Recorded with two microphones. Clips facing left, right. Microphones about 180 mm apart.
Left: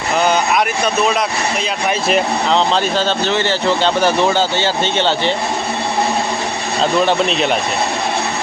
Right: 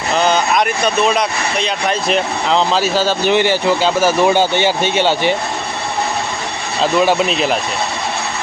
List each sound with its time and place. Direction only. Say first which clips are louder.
0.2 s a sound: even; 10° left (ahead or behind)
1.0 s speech: right 1 dB; centre (ahead or behind)
7.0 s speech: right 1 dB; 5° right (ahead or behind)